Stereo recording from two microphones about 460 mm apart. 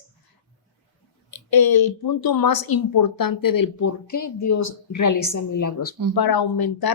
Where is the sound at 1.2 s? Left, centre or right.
Left.